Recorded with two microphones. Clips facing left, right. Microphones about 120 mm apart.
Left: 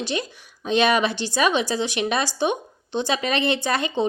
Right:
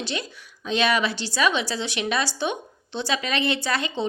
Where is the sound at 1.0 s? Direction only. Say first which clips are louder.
Left 3 dB; 20° left (ahead or behind).